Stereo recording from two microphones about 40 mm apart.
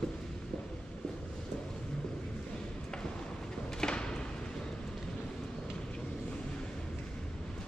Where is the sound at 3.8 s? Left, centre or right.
Left.